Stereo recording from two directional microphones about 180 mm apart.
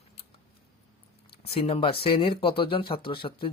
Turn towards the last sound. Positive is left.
turn(degrees=30)  # may be behind; listen again after turning